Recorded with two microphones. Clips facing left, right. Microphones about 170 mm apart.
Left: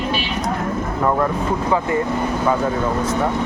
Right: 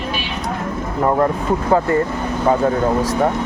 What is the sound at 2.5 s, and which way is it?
Speech, 35° right (ahead or behind).